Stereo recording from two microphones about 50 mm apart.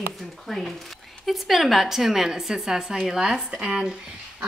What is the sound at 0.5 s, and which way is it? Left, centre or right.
A woman's voice, centre.